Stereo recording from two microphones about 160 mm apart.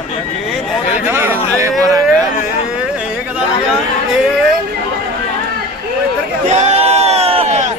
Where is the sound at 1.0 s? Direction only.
15° right (ahead or behind).